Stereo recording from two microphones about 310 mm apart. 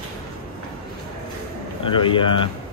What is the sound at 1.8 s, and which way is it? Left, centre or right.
Speech, centre.